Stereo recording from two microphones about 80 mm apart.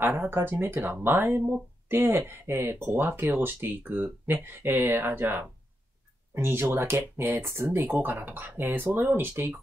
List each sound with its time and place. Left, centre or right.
0.0 s speech: right